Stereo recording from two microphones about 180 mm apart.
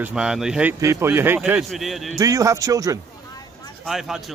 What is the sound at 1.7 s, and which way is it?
Speech, centre (ahead or behind).